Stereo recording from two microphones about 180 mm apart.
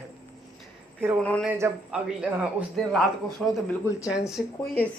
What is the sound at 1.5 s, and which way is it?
A man's voice, 15° right (ahead or behind).